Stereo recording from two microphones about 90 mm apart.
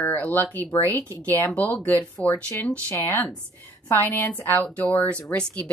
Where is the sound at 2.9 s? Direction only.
25° left (ahead or behind).